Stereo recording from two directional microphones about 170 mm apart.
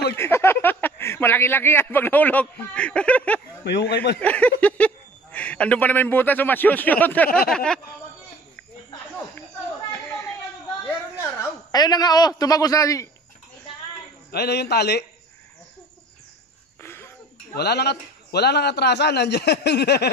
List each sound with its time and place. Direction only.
0.1 s a sound: 15° left (ahead or behind)
3.6 s a man's voice: 80° left
4.2 s a sound: 10° left (ahead or behind)
7.4 s speech: 5° left (ahead or behind)
9.8 s chatter: 15° left (ahead or behind)
10.9 s a man's voice: 15° left (ahead or behind)
14.3 s a man's voice: 70° left (ahead or behind)
16.8 s a sound: 15° left (ahead or behind)
17.6 s a man's voice: 70° left (ahead or behind)